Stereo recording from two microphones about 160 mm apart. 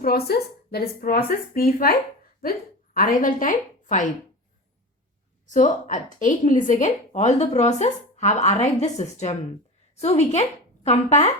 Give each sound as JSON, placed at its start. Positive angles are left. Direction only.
{"t": 0.0, "sound": "a woman's voice", "side_deg": 75}
{"t": 5.5, "sound": "a woman's voice", "side_deg": 50}